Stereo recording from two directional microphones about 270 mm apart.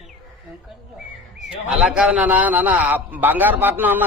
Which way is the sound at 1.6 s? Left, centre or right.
Centre.